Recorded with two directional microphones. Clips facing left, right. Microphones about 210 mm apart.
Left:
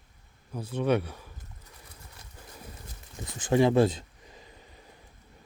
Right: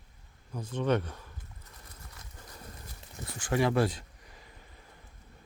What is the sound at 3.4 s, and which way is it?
Speech, 20° left (ahead or behind).